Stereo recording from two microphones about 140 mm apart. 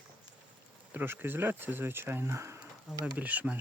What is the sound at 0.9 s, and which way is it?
Speech, 15° right (ahead or behind).